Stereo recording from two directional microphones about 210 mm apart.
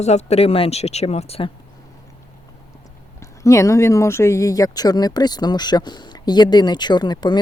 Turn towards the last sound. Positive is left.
turn(degrees=20)  # may be behind; listen again after turning